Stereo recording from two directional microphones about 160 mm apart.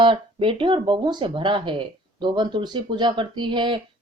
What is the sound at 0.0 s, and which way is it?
Speech, 30° right (ahead or behind).